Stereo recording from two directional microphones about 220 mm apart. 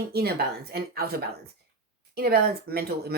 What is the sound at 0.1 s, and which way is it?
Speech, 45° right (ahead or behind).